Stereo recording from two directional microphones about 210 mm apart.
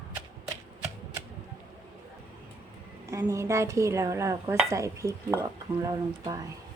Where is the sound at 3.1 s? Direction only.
15° right (ahead or behind).